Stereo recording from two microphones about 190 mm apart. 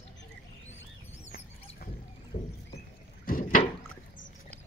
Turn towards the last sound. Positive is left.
turn(degrees=45)  # may be behind; listen again after turning